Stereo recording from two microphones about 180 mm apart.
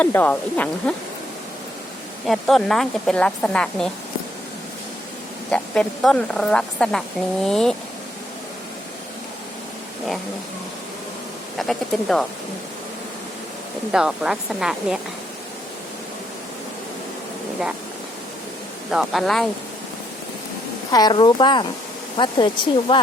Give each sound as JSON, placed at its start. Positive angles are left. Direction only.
{"t": 0.0, "sound": "speech", "side_deg": 10}
{"t": 2.2, "sound": "speech", "side_deg": 0}
{"t": 5.5, "sound": "speech", "side_deg": 5}
{"t": 11.6, "sound": "speech", "side_deg": 0}
{"t": 13.9, "sound": "speech", "side_deg": -5}
{"t": 18.9, "sound": "speech", "side_deg": 0}
{"t": 20.9, "sound": "speech", "side_deg": 25}